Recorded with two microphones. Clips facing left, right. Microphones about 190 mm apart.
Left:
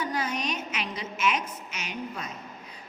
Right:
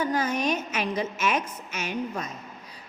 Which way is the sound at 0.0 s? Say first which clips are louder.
Right 5 dB; 45° right (ahead or behind).